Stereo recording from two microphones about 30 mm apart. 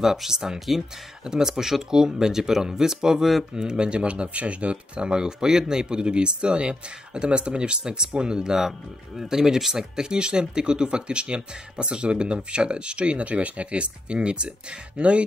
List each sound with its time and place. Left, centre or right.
0.0 s speech: centre; by 5.1 s right
5.1 s speech: right
8.5 s speech: centre; by 13.0 s right
13.0 s speech: right